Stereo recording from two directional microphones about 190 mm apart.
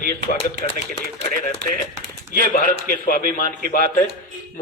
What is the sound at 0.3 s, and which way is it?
Speech, 30° left (ahead or behind).